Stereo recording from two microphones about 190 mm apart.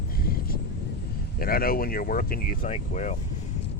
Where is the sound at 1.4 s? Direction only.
50° left (ahead or behind).